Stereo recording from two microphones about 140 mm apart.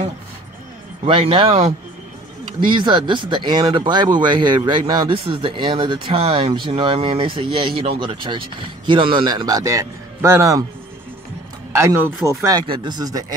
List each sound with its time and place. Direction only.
1.0 s speech: 40° right (ahead or behind)
2.7 s speech: 35° right (ahead or behind)
11.7 s a man's voice: 20° right (ahead or behind)